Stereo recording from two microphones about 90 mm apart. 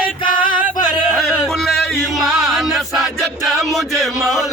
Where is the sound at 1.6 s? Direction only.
Centre (ahead or behind).